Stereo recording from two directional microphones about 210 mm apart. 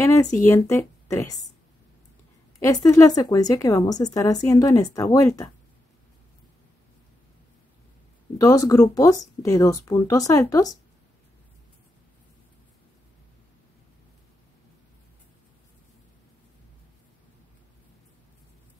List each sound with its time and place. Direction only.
0.0 s a woman's voice: 15° left (ahead or behind)
2.6 s a woman's voice: 15° left (ahead or behind)
8.4 s a woman's voice: 15° left (ahead or behind)